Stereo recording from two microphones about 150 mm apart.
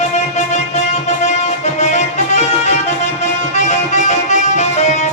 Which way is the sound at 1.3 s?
50° left (ahead or behind).